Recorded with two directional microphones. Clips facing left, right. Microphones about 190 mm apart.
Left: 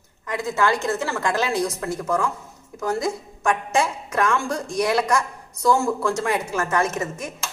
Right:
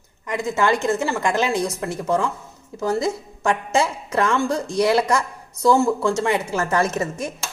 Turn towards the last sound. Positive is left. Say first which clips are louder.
# right 2 dB
turn(degrees=-35)  # may be behind; listen again after turning